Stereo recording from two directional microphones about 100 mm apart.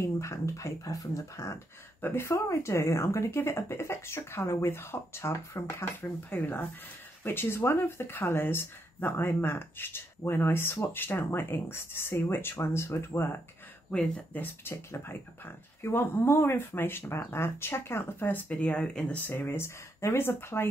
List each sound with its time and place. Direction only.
0.0 s speech: 30° left (ahead or behind)
2.0 s speech: 20° left (ahead or behind)